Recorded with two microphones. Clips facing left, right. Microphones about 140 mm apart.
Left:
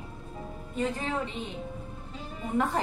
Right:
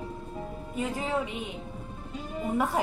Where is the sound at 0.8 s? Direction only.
10° right (ahead or behind).